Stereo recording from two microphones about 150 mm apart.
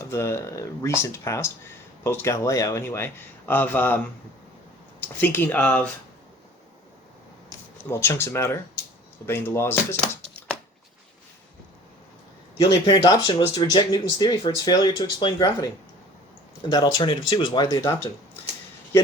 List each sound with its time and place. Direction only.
0.1 s speech: 20° left (ahead or behind)
7.9 s speech: 15° left (ahead or behind)
12.8 s speech: 30° left (ahead or behind)